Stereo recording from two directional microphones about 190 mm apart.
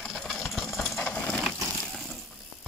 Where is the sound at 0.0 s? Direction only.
Centre (ahead or behind).